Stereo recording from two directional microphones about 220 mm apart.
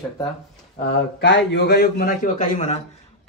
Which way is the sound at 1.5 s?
50° left (ahead or behind).